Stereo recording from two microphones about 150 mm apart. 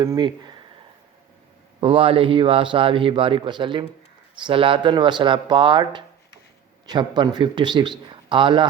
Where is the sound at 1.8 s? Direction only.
35° right (ahead or behind).